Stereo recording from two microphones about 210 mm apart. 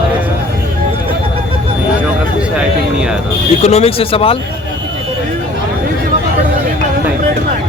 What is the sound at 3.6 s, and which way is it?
Speech, 30° left (ahead or behind).